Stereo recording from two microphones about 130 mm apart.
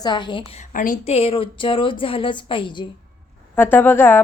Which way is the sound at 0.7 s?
90° left.